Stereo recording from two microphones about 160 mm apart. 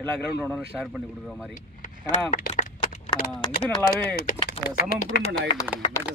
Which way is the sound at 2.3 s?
55° left (ahead or behind).